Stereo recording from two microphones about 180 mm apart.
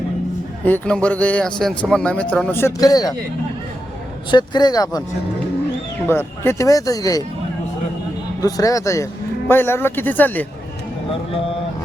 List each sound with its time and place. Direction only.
0.6 s speech: 5° left (ahead or behind)
4.3 s speech: 25° left (ahead or behind)
6.1 s speech: 15° left (ahead or behind)
8.4 s speech: 20° left (ahead or behind)